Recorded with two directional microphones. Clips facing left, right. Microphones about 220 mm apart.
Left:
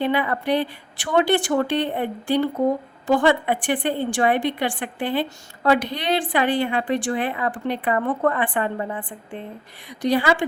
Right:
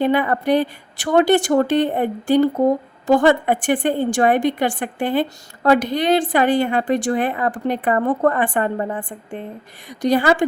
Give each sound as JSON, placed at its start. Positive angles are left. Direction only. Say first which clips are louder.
{"t": 0.0, "sound": "a woman's voice", "louder": "right 4 dB", "side_deg": -45}